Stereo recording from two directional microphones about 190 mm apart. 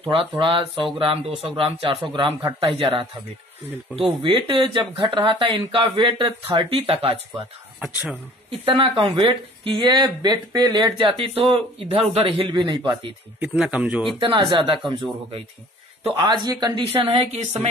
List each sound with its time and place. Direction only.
0.0 s speech: 30° right (ahead or behind)
4.2 s speech: 25° right (ahead or behind)
7.8 s speech: 5° right (ahead or behind)
8.5 s speech: 30° right (ahead or behind)
13.4 s speech: 5° right (ahead or behind)
14.1 s speech: 25° right (ahead or behind)
16.4 s speech: 20° right (ahead or behind)